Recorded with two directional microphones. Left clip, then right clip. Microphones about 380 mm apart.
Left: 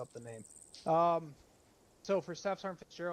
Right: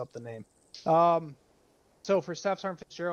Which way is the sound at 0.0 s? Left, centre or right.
Centre.